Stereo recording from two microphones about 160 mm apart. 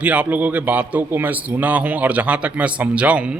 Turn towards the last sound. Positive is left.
turn(degrees=-5)  # may be behind; listen again after turning